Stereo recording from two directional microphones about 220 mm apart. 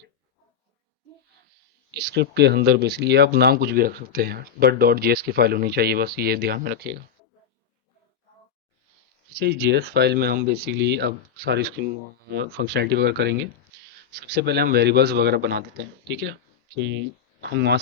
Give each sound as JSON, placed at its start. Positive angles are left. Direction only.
{"t": 1.9, "sound": "speech", "side_deg": -50}
{"t": 9.4, "sound": "speech", "side_deg": -45}
{"t": 16.7, "sound": "speech", "side_deg": -55}